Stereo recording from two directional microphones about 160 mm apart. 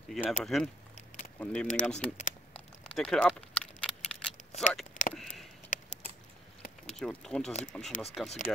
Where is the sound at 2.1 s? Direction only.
45° left (ahead or behind).